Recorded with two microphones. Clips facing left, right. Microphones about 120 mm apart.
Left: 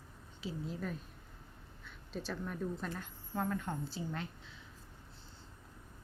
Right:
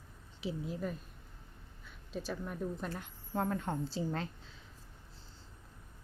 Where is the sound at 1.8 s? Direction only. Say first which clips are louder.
Right 2 dB; 10° right (ahead or behind).